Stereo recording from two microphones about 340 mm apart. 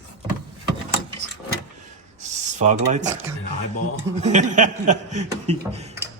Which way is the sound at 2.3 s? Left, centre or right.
Right.